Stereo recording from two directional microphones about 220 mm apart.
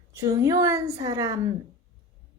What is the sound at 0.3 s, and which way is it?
Speech, 15° right (ahead or behind).